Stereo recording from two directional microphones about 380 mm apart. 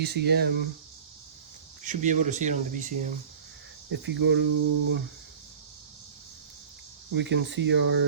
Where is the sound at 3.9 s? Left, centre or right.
Right.